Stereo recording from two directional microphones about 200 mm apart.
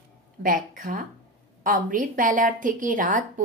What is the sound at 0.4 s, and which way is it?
A woman's voice, 45° right (ahead or behind).